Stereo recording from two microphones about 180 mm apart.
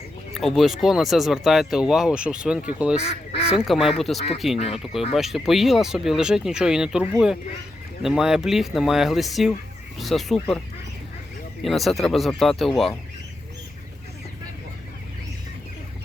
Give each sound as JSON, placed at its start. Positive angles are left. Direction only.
{"t": 0.3, "sound": "speech", "side_deg": 0}
{"t": 3.0, "sound": "speech", "side_deg": 35}
{"t": 3.6, "sound": "speech", "side_deg": 0}
{"t": 4.5, "sound": "speech", "side_deg": 35}
{"t": 5.1, "sound": "speech", "side_deg": 0}
{"t": 11.6, "sound": "speech", "side_deg": 0}